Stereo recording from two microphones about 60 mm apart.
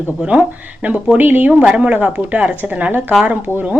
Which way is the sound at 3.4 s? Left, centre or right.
Right.